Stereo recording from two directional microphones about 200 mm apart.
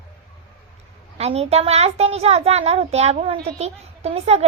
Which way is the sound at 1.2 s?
30° right (ahead or behind).